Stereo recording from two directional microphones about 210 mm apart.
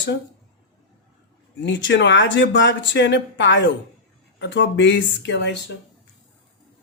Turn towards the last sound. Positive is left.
turn(degrees=55)  # may be behind; listen again after turning